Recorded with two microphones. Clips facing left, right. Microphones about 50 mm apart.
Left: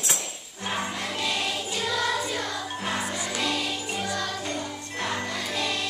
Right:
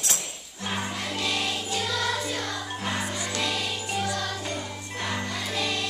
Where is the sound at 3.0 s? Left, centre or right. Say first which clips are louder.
Left 1 dB; centre.